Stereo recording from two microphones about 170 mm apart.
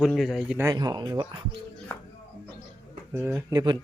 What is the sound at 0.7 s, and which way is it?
Speech, 25° right (ahead or behind).